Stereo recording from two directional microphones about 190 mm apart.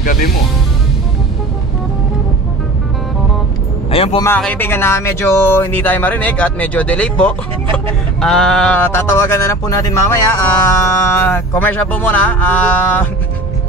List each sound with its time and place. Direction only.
0.0 s music: 45° left (ahead or behind)
3.9 s a man's voice: 30° left (ahead or behind)
4.4 s speech: 10° left (ahead or behind)